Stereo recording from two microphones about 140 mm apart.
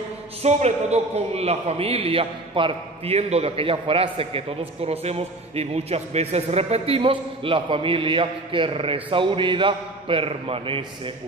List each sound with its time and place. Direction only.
0.4 s a man's voice: 50° right (ahead or behind)